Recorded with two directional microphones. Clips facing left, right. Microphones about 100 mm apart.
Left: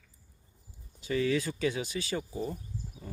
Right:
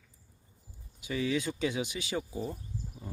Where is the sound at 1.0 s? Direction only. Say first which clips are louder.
Left 2 dB; 15° right (ahead or behind).